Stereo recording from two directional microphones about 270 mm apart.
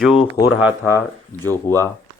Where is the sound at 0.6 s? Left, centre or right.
Centre.